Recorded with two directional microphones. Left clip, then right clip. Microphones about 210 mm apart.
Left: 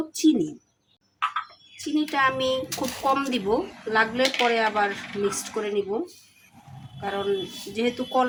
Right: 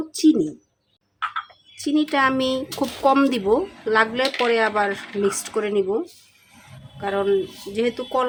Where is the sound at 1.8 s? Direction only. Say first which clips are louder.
Right 3 dB; 50° right (ahead or behind).